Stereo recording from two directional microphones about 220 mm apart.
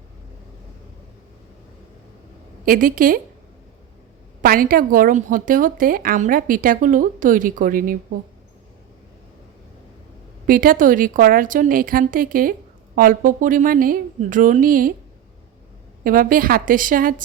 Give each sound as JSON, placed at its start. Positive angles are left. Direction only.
{"t": 2.6, "sound": "a woman's voice", "side_deg": -40}
{"t": 4.4, "sound": "a woman's voice", "side_deg": -40}
{"t": 10.4, "sound": "a woman's voice", "side_deg": -40}
{"t": 16.0, "sound": "a woman's voice", "side_deg": -40}